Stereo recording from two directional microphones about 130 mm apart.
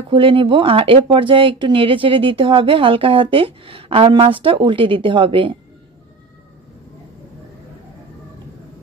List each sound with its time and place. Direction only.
0.1 s speech: 40° right (ahead or behind)